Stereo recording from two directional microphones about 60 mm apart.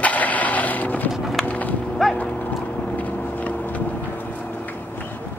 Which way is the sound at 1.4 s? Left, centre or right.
Left.